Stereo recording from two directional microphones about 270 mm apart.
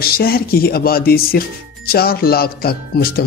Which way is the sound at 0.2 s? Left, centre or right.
Left.